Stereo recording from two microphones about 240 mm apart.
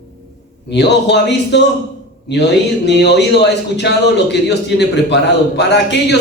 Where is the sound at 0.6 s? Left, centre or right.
Left.